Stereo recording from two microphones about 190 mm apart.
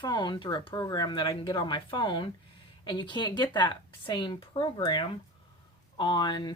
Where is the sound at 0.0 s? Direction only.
20° left (ahead or behind).